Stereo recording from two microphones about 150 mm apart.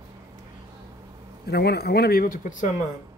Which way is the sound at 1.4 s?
90° left.